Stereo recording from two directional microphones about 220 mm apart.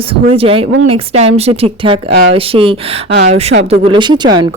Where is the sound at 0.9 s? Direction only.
25° right (ahead or behind).